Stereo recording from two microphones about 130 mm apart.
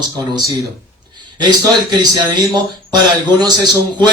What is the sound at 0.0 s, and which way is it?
A man's voice, 35° right (ahead or behind).